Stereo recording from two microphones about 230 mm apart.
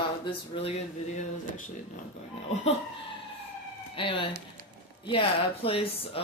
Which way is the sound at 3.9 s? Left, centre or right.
Left.